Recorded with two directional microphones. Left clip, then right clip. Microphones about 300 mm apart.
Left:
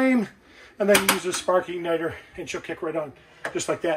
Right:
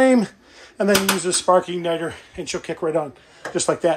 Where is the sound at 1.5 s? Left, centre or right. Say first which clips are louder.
Right 3 dB; centre.